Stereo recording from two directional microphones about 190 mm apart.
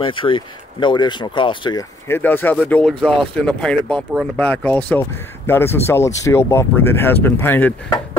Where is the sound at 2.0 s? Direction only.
10° left (ahead or behind).